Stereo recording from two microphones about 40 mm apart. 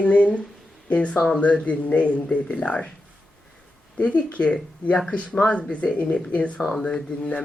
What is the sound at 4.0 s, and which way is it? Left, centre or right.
Speech, left.